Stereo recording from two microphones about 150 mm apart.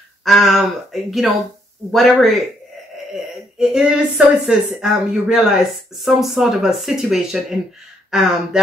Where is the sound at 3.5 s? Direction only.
5° right (ahead or behind).